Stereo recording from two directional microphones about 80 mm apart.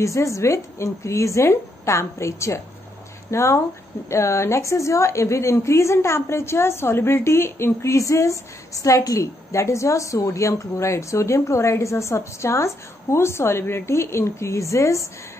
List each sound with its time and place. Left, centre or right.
0.0 s a woman's voice: left